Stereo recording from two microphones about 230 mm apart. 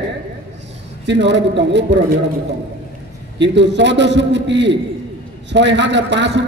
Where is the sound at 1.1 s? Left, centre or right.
Right.